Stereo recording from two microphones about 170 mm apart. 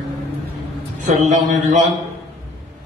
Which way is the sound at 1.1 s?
45° right (ahead or behind).